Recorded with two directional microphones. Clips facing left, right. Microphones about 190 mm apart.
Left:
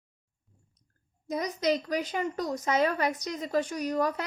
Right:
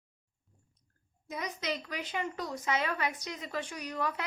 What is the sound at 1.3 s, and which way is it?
A woman's voice, 40° left (ahead or behind).